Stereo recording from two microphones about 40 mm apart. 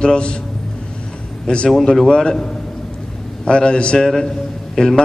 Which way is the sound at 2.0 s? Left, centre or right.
Left.